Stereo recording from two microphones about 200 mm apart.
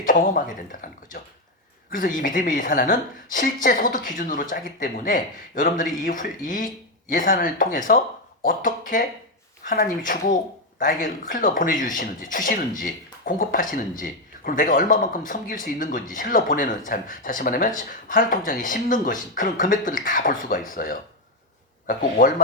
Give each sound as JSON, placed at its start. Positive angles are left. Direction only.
{"t": 0.0, "sound": "speech", "side_deg": 40}
{"t": 22.2, "sound": "speech", "side_deg": 45}